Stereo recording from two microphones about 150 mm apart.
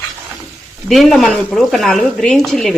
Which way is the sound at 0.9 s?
Centre (ahead or behind).